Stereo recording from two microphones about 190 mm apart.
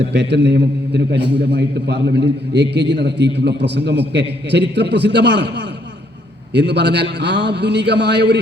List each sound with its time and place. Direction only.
0.0 s a man's voice: 65° right (ahead or behind)